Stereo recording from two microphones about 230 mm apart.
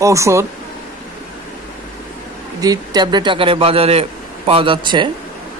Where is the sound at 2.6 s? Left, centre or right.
Centre.